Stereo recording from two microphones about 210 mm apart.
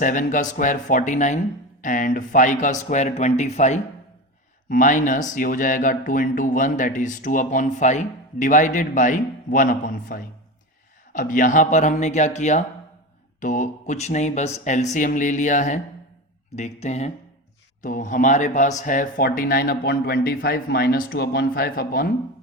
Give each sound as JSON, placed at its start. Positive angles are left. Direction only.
{"t": 0.0, "sound": "a man's voice", "side_deg": 40}